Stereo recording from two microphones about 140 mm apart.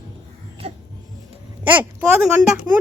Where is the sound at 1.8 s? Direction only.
5° right (ahead or behind).